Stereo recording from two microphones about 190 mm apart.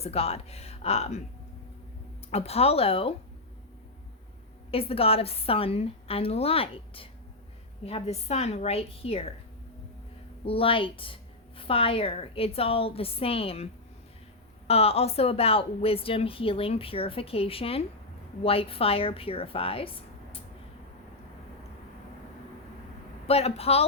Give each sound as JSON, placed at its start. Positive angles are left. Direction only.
{"t": 0.0, "sound": "a woman's voice", "side_deg": 30}
{"t": 2.3, "sound": "a woman's voice", "side_deg": 30}
{"t": 4.7, "sound": "a woman's voice", "side_deg": 30}
{"t": 10.4, "sound": "a woman's voice", "side_deg": 30}
{"t": 14.7, "sound": "a woman's voice", "side_deg": 30}
{"t": 23.2, "sound": "a woman's voice", "side_deg": 30}